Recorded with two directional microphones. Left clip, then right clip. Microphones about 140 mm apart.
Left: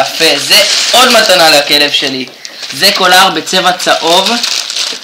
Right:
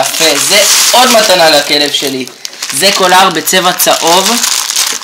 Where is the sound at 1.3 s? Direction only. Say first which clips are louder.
Left 1 dB; 25° right (ahead or behind); by 4.1 s 40° right (ahead or behind).